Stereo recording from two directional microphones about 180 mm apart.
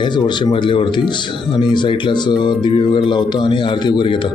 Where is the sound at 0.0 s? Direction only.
25° left (ahead or behind).